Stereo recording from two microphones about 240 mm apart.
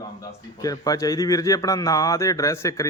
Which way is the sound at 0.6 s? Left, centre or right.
Centre.